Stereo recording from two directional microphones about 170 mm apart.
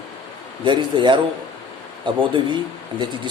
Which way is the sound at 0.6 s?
30° right (ahead or behind).